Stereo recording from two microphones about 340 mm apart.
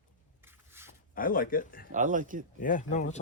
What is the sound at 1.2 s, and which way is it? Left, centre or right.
Speech, left.